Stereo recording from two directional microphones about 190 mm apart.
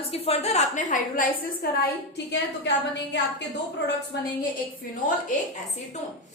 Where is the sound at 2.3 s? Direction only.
65° left (ahead or behind).